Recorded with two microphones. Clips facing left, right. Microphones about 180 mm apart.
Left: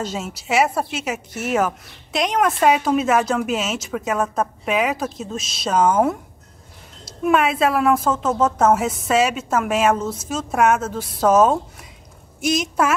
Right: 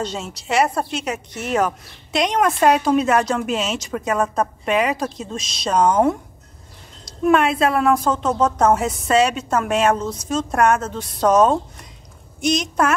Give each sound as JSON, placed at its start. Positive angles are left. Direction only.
{"t": 0.0, "sound": "a woman's voice", "side_deg": 5}